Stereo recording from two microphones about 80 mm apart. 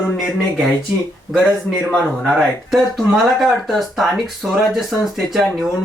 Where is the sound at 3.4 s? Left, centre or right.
Centre.